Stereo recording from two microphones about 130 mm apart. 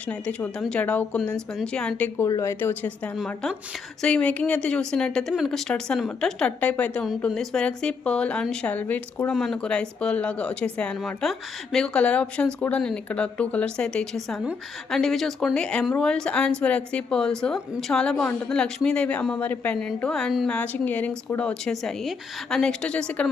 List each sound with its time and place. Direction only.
0.1 s speech: 10° left (ahead or behind)
2.1 s speech: 20° left (ahead or behind)
3.2 s speech: 5° left (ahead or behind)
9.3 s speech: centre (ahead or behind)